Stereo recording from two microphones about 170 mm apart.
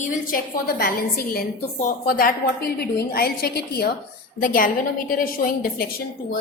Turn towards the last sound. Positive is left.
turn(degrees=60)  # may be behind; listen again after turning